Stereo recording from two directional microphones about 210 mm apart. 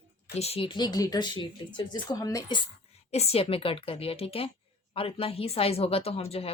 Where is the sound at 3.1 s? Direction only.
30° left (ahead or behind).